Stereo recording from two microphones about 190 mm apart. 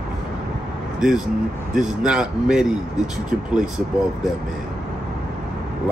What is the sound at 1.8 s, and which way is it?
Speech, 5° right (ahead or behind).